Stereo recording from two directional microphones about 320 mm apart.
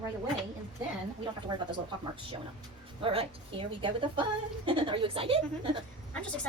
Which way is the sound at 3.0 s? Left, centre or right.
Centre.